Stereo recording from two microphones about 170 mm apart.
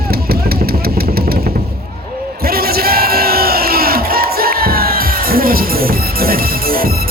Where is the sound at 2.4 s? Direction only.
65° right (ahead or behind).